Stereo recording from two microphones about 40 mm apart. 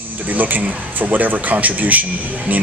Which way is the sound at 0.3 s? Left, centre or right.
Right.